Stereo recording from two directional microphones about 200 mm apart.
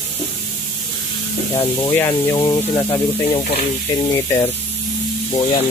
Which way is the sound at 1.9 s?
15° left (ahead or behind).